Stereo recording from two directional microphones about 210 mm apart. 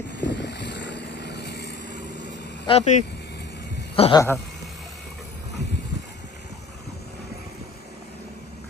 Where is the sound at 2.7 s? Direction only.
30° left (ahead or behind).